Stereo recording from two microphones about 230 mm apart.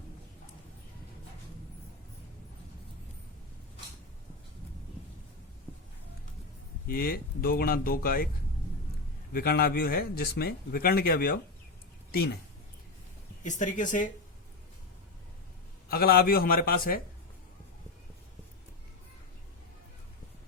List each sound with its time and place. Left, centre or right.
6.8 s a man's voice: left
9.3 s a man's voice: left
13.4 s a man's voice: left
15.9 s a man's voice: left